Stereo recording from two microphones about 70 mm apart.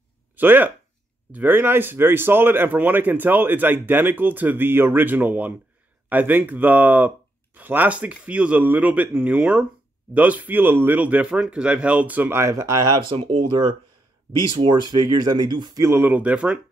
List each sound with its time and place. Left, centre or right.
0.4 s speech: right
11.2 s speech: centre; by 12.5 s right
12.5 s speech: right
14.8 s speech: right
15.8 s speech: right
16.1 s speech: right